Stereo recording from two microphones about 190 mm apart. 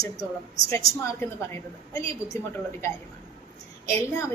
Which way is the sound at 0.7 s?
15° left (ahead or behind).